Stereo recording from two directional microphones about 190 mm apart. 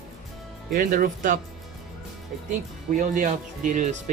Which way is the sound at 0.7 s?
50° right (ahead or behind).